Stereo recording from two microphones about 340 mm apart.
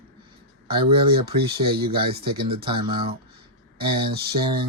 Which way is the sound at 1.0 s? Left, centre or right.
Centre.